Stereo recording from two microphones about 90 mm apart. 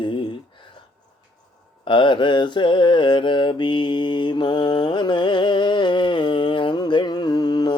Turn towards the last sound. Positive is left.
turn(degrees=50)  # may be behind; listen again after turning